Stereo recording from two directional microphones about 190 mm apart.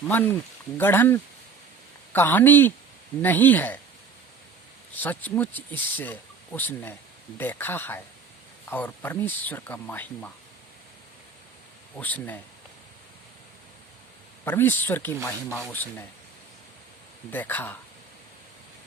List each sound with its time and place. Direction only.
0.1 s speech: 10° left (ahead or behind)
4.9 s speech: 10° left (ahead or behind)
11.9 s speech: 10° left (ahead or behind)
14.4 s speech: 10° left (ahead or behind)
17.3 s speech: 10° left (ahead or behind)